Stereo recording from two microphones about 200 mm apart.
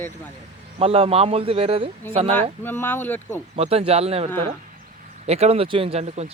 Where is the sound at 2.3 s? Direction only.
10° left (ahead or behind).